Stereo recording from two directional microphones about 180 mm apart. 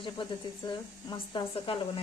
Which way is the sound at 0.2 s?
30° left (ahead or behind).